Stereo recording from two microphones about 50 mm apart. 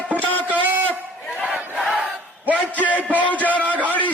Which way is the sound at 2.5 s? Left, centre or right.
Left.